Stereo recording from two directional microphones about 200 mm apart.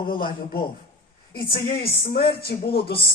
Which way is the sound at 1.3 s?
45° left (ahead or behind).